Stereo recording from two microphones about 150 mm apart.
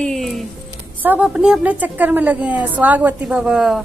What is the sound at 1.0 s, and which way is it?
A woman's voice, 10° right (ahead or behind).